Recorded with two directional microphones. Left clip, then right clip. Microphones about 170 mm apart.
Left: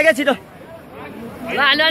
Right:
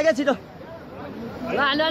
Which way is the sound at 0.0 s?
15° left (ahead or behind).